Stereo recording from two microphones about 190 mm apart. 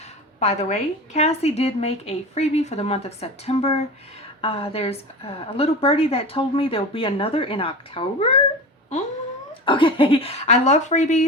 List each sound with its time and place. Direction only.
0.3 s a woman's voice: 35° left (ahead or behind)
9.6 s a woman's voice: 25° left (ahead or behind)